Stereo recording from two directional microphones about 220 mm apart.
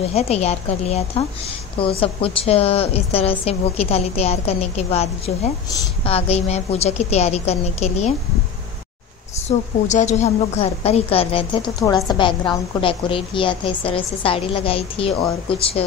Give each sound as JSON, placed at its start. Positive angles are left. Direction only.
{"t": 0.0, "sound": "a woman's voice", "side_deg": 30}
{"t": 9.5, "sound": "a woman's voice", "side_deg": 30}